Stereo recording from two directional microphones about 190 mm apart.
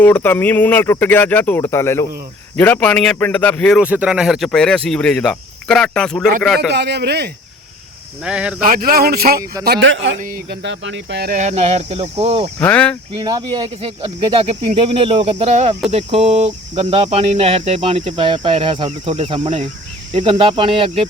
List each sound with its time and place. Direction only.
0.0 s speech: 10° left (ahead or behind)
3.8 s speech: 5° right (ahead or behind)
6.7 s speech: 65° right (ahead or behind)
8.2 s speech: 5° right (ahead or behind)
8.6 s speech: 50° right (ahead or behind)
9.6 s speech: 65° right (ahead or behind)
10.2 s speech: 50° right (ahead or behind)
11.3 s speech: 35° right (ahead or behind)
12.5 s speech: 5° left (ahead or behind)
13.1 s speech: 20° right (ahead or behind)